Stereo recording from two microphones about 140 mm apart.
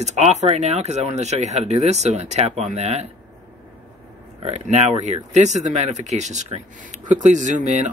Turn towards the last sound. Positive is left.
turn(degrees=-60)  # may be behind; listen again after turning